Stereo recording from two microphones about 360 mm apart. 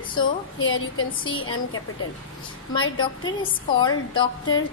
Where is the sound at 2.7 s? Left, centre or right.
Centre.